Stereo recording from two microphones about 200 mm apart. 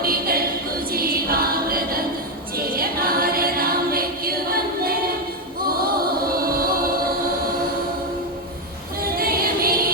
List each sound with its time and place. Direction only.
0.0 s a capella: 45° right (ahead or behind)
0.9 s music: 50° right (ahead or behind)
9.0 s music: 50° right (ahead or behind)